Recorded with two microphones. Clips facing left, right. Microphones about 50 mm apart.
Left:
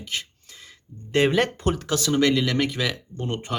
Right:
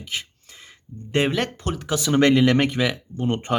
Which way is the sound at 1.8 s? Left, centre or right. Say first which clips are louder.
Right 1 dB; centre.